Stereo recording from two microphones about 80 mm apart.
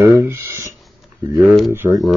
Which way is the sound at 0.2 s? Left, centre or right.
Right.